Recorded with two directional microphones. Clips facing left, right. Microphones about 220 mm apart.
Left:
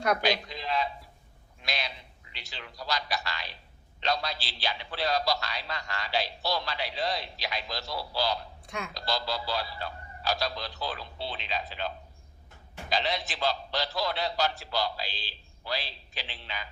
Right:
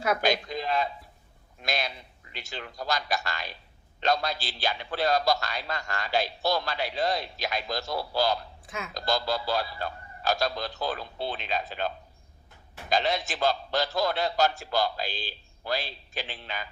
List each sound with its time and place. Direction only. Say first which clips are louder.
0.2 s a sound: right 3 dB; 50° right (ahead or behind)
1.6 s a man's voice: right 5 dB; 50° right (ahead or behind)
8.6 s speech: even; centre (ahead or behind)
8.9 s a man's voice: right 5 dB; 50° right (ahead or behind)
12.9 s a man's voice: right 4 dB; 45° right (ahead or behind)